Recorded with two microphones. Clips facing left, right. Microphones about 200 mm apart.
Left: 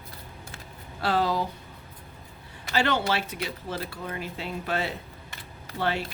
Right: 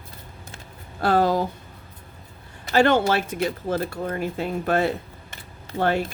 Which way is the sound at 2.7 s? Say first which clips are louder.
Right 7 dB; 50° right (ahead or behind).